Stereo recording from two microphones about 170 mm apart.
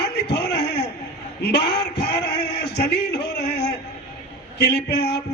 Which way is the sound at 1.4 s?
80° left.